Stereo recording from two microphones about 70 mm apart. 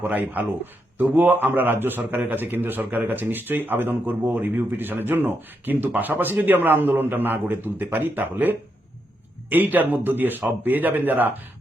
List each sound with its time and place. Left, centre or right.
0.0 s speech: right